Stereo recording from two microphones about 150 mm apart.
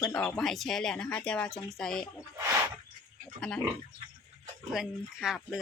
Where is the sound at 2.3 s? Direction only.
20° right (ahead or behind).